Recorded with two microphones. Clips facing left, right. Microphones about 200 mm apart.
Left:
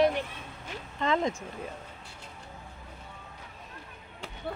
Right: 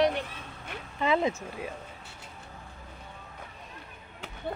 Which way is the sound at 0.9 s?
10° right (ahead or behind).